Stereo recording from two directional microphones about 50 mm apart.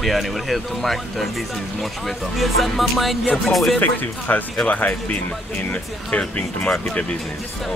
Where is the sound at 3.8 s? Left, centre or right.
Left.